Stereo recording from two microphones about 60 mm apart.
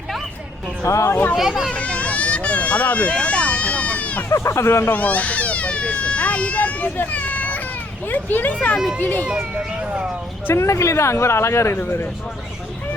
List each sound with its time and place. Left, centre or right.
0.9 s speech: left
1.4 s speech: centre
1.7 s a sound: centre
4.3 s speech: left
4.9 s cat: left
9.0 s a child's voice: left
9.4 s speech: right
10.5 s speech: left
11.8 s speech: left